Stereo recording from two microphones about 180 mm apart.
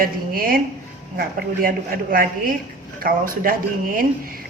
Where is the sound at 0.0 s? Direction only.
55° right (ahead or behind).